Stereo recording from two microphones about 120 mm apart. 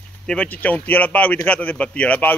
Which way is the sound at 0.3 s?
10° left (ahead or behind).